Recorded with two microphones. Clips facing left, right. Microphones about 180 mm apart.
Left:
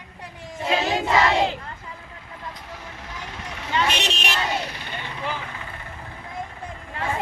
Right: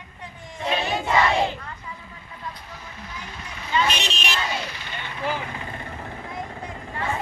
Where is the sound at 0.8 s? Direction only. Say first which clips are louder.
Left 3 dB; 90° left.